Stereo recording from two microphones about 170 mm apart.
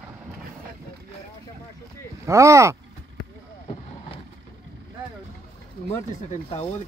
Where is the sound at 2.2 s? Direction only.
15° right (ahead or behind).